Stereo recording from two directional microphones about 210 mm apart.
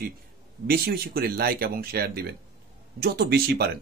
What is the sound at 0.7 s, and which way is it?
Speech, 45° right (ahead or behind).